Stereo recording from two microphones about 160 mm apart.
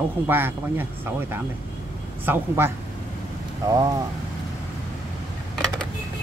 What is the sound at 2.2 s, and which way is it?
Speech, 15° right (ahead or behind).